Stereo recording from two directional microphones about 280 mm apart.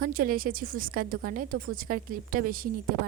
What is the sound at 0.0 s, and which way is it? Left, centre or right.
A woman's voice, right.